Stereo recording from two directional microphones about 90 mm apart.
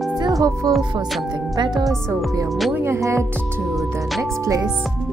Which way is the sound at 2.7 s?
30° right (ahead or behind).